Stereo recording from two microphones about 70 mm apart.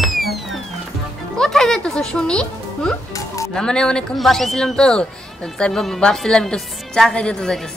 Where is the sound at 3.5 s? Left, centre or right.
Centre.